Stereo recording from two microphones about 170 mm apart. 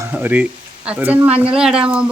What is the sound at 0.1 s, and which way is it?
A man's voice, 10° right (ahead or behind).